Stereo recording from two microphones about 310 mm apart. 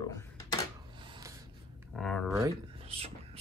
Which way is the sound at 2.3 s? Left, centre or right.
Centre.